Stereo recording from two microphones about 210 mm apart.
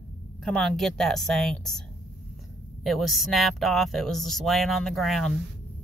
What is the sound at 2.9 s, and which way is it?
Speech, centre (ahead or behind).